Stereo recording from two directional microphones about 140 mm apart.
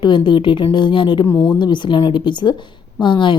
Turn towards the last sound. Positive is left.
turn(degrees=35)  # may be behind; listen again after turning